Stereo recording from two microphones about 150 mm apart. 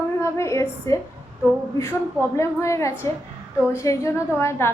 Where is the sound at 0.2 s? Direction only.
20° left (ahead or behind).